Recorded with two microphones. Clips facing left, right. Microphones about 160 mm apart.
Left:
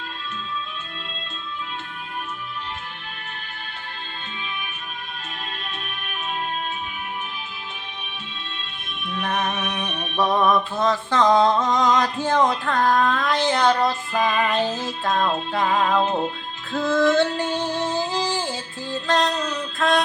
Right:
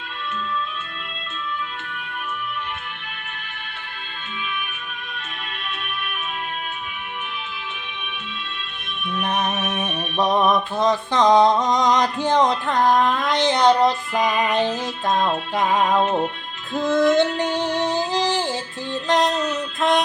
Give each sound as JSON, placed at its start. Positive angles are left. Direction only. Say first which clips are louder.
{"t": 9.2, "sound": "mantra", "louder": "right 1 dB", "side_deg": -20}
{"t": 16.7, "sound": "music", "louder": "right 1 dB", "side_deg": -20}